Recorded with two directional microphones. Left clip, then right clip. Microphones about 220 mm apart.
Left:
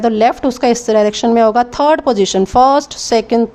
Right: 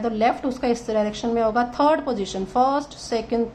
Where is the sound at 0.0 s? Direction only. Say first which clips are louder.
Left 9 dB; 45° left (ahead or behind).